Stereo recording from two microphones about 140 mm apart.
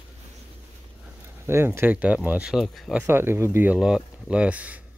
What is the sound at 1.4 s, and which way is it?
Speech, 15° right (ahead or behind).